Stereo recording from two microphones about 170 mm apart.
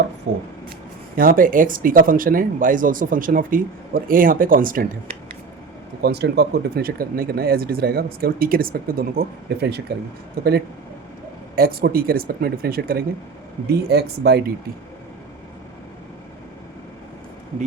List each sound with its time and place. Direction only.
1.1 s speech: 55° right (ahead or behind)
6.0 s speech: 75° right (ahead or behind)
10.4 s speech: 60° right (ahead or behind)
11.5 s speech: 60° right (ahead or behind)